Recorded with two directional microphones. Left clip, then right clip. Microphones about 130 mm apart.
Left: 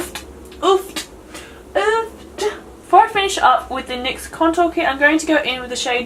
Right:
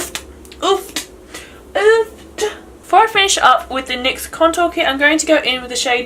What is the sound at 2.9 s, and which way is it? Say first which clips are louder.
A woman's voice: right 1 dB; 40° right (ahead or behind).